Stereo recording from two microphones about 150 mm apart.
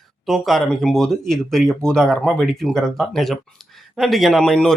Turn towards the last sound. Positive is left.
turn(degrees=5)  # may be behind; listen again after turning